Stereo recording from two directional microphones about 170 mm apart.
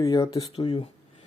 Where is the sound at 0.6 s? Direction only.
35° left (ahead or behind).